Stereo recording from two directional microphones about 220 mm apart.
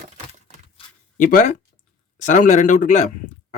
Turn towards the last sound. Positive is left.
turn(degrees=35)  # may be behind; listen again after turning